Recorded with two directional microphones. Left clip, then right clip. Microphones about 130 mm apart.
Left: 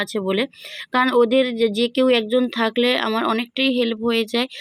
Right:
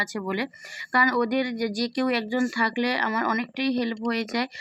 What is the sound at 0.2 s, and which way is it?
Speech, 30° left (ahead or behind).